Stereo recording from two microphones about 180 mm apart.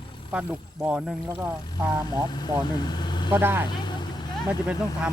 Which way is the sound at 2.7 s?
25° left (ahead or behind).